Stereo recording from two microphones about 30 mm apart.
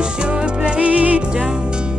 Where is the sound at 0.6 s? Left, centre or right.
Right.